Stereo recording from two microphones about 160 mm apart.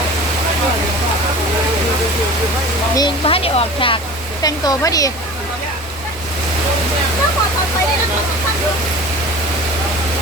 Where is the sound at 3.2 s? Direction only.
35° left (ahead or behind).